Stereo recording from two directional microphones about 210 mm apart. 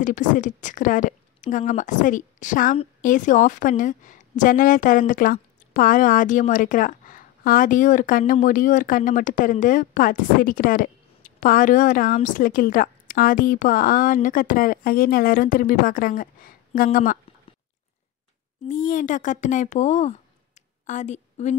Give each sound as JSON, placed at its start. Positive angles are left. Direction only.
{"t": 0.0, "sound": "a woman's voice", "side_deg": 40}
{"t": 18.7, "sound": "a woman's voice", "side_deg": 40}